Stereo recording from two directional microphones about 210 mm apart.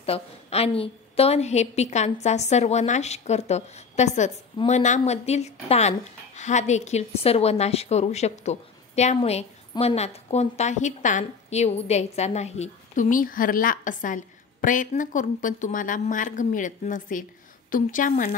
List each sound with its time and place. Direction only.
0.0 s a woman's voice: 30° left (ahead or behind)